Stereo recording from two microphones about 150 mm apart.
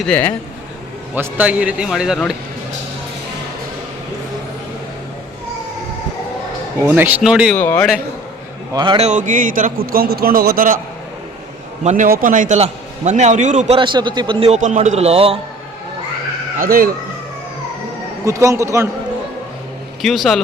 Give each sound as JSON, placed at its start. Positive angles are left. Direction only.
{"t": 0.0, "sound": "a man's voice", "side_deg": 10}
{"t": 1.1, "sound": "speech", "side_deg": -10}
{"t": 6.8, "sound": "a man's voice", "side_deg": -10}
{"t": 7.5, "sound": "a man's voice", "side_deg": 10}
{"t": 8.7, "sound": "a man's voice", "side_deg": -30}
{"t": 9.0, "sound": "a man's voice", "side_deg": -55}
{"t": 11.8, "sound": "a man's voice", "side_deg": -50}
{"t": 12.0, "sound": "a man's voice", "side_deg": -70}
{"t": 13.7, "sound": "a man's voice", "side_deg": -30}
{"t": 16.6, "sound": "a man's voice", "side_deg": -70}
{"t": 18.3, "sound": "a man's voice", "side_deg": -20}
{"t": 20.0, "sound": "a man's voice", "side_deg": 0}